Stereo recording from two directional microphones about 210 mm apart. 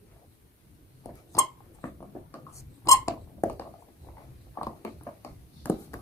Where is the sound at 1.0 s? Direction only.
15° left (ahead or behind).